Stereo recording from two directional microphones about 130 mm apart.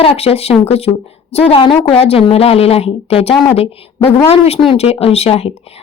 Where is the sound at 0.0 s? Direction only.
45° left (ahead or behind).